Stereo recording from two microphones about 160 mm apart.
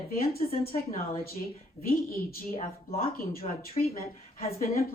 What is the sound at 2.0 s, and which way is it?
A woman's voice, 60° left (ahead or behind).